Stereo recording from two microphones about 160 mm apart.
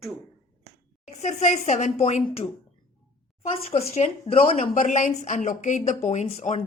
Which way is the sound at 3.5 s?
40° left (ahead or behind).